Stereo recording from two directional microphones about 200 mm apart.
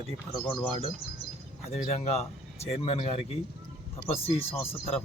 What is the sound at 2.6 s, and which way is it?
Speech, 30° left (ahead or behind).